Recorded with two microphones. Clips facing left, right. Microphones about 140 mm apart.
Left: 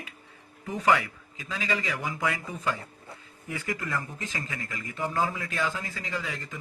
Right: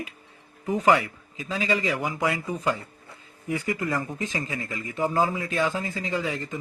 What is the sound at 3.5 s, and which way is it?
A man's voice, 20° right (ahead or behind).